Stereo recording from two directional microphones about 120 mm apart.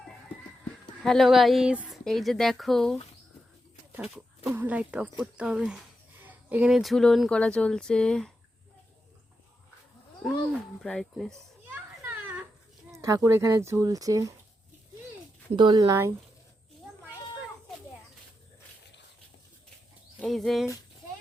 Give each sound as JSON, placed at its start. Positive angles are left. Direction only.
{"t": 1.0, "sound": "speech", "side_deg": 0}
{"t": 2.0, "sound": "speech", "side_deg": 5}
{"t": 4.4, "sound": "speech", "side_deg": -15}
{"t": 10.2, "sound": "a sound", "side_deg": -5}
{"t": 10.8, "sound": "speech", "side_deg": 5}
{"t": 11.3, "sound": "a sound", "side_deg": -15}
{"t": 12.9, "sound": "speech", "side_deg": -25}
{"t": 15.5, "sound": "speech", "side_deg": -35}
{"t": 20.2, "sound": "speech", "side_deg": 0}